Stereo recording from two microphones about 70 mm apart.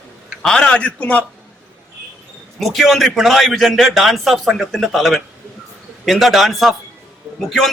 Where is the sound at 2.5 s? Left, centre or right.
Centre.